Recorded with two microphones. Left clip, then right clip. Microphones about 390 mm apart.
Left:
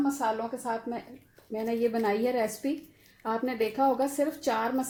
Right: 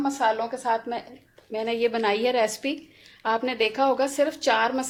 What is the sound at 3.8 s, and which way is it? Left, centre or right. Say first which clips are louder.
A woman's voice: right 3 dB; right.